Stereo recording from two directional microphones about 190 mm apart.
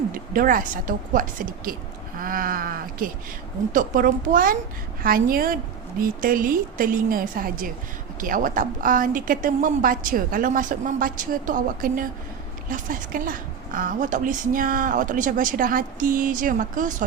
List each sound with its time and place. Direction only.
0.1 s a woman's voice: 45° right (ahead or behind)